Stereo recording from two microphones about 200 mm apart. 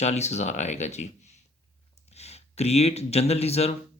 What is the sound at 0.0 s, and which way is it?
Speech, 35° left (ahead or behind).